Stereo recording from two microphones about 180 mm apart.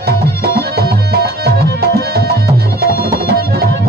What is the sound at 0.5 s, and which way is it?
Music, 60° right (ahead or behind).